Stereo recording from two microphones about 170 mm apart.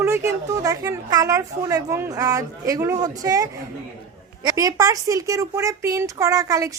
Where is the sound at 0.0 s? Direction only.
15° right (ahead or behind).